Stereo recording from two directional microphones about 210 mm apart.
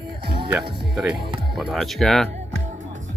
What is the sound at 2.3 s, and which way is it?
Music, 35° right (ahead or behind).